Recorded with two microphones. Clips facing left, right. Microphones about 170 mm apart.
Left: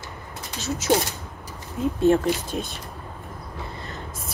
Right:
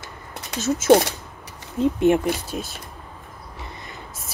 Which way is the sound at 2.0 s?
15° right (ahead or behind).